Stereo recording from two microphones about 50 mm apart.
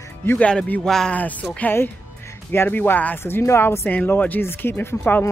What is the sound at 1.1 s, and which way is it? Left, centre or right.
Speech, left.